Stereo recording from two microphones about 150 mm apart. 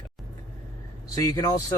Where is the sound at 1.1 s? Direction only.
25° left (ahead or behind).